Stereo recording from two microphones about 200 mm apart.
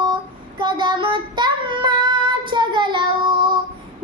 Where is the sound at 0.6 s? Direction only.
20° right (ahead or behind).